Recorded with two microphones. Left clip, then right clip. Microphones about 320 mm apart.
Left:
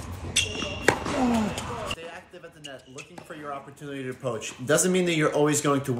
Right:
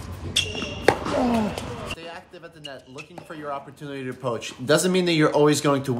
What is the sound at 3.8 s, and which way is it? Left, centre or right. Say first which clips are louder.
Speech: right 3 dB; centre.